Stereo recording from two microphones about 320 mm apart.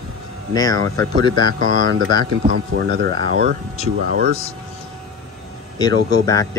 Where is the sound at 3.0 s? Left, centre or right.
Right.